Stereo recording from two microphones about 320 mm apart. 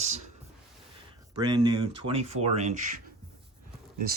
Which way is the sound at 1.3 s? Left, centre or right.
Centre.